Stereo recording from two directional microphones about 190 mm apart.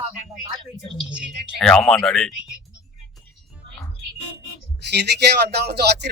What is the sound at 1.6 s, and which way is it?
Speech, 5° left (ahead or behind).